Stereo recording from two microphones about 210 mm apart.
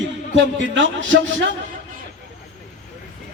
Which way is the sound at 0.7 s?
60° right (ahead or behind).